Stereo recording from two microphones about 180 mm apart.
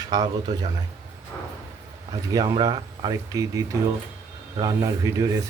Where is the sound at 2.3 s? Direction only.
25° right (ahead or behind).